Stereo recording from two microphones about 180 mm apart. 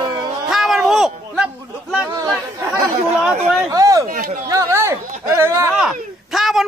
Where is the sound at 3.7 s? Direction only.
20° right (ahead or behind).